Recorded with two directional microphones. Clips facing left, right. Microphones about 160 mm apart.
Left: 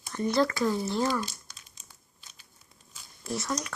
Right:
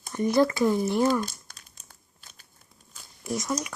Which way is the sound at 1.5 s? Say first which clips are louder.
Right 1 dB; 55° right (ahead or behind).